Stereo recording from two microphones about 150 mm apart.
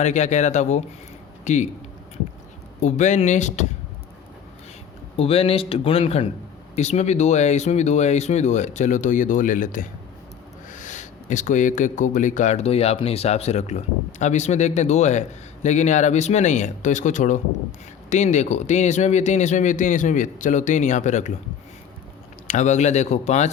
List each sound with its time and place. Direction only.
0.0 s speech: 50° left (ahead or behind)
2.8 s speech: 50° left (ahead or behind)
5.1 s speech: 40° left (ahead or behind)
22.4 s speech: 55° left (ahead or behind)